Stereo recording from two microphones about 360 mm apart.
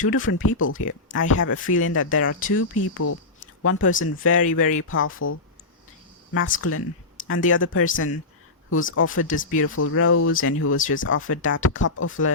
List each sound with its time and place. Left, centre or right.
0.1 s speech: left
1.5 s speech: left
1.8 s speech: left
6.4 s speech: left